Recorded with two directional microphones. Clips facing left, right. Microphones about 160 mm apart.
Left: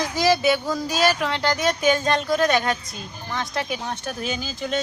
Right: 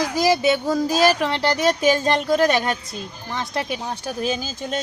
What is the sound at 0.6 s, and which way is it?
Music, 35° right (ahead or behind).